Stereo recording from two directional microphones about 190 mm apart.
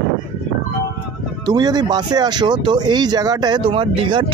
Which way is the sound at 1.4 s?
20° right (ahead or behind).